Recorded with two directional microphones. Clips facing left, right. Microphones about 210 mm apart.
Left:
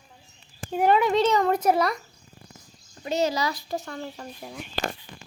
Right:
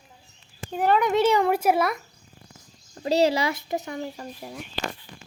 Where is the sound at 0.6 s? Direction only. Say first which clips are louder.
Left 1 dB; 10° left (ahead or behind).